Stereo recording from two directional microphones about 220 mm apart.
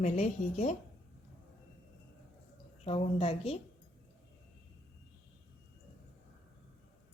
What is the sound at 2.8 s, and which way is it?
Speech, 25° left (ahead or behind).